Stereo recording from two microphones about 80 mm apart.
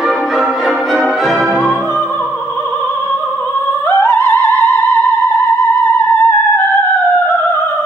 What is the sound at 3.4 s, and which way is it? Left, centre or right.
Opera, left.